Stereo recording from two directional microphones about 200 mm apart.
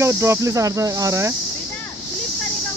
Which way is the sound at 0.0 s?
10° right (ahead or behind).